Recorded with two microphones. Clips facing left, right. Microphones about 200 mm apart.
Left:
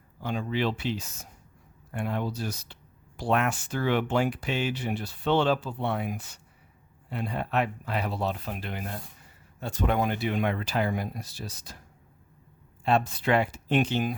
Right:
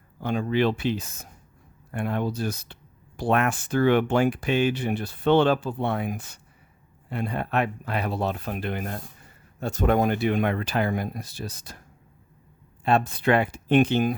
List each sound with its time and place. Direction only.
0.2 s speech: 55° right (ahead or behind)
12.8 s speech: 55° right (ahead or behind)